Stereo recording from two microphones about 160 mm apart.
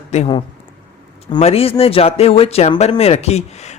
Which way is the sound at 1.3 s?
40° left (ahead or behind).